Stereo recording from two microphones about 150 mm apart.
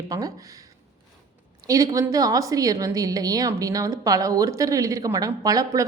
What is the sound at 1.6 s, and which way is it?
A woman's voice, 20° right (ahead or behind).